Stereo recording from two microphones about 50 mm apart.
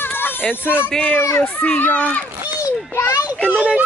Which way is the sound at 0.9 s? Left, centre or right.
Left.